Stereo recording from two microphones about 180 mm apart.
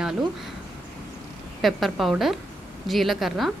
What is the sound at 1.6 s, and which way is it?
A woman's voice, centre (ahead or behind).